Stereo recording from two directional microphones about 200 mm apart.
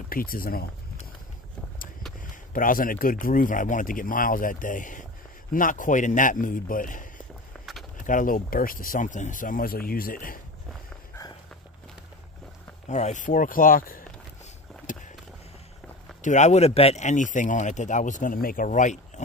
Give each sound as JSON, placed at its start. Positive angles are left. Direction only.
{"t": 0.1, "sound": "speech", "side_deg": 45}
{"t": 2.5, "sound": "speech", "side_deg": 45}
{"t": 7.5, "sound": "a sound", "side_deg": 5}
{"t": 8.0, "sound": "speech", "side_deg": 40}
{"t": 12.8, "sound": "speech", "side_deg": 35}
{"t": 14.9, "sound": "a sound", "side_deg": 40}
{"t": 16.2, "sound": "speech", "side_deg": 35}